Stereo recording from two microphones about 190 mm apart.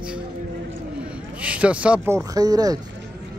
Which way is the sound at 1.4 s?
5° right (ahead or behind).